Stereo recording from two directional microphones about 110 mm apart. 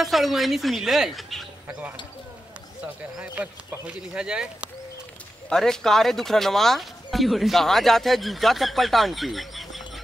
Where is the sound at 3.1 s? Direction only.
10° right (ahead or behind).